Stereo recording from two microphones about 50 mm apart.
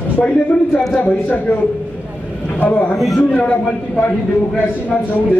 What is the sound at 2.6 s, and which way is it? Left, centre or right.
Speech, left.